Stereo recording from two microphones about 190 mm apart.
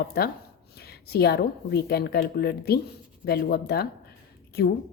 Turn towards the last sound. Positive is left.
turn(degrees=55)  # may be behind; listen again after turning